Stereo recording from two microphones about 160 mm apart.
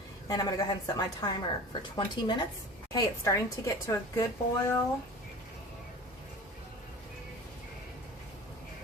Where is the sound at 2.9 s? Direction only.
20° left (ahead or behind).